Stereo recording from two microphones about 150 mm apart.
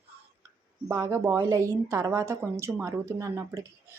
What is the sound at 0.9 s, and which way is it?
A woman's voice, 20° right (ahead or behind).